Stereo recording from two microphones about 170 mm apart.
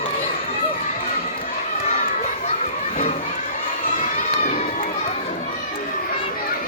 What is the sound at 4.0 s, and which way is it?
Run, 40° left (ahead or behind).